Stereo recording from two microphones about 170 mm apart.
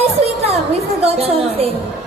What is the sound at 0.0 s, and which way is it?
Music, 40° right (ahead or behind).